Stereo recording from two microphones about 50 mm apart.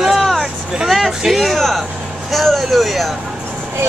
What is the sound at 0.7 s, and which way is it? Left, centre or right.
A woman's voice, centre.